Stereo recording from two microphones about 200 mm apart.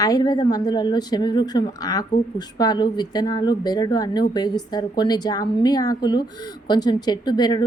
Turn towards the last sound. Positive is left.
turn(degrees=20)  # may be behind; listen again after turning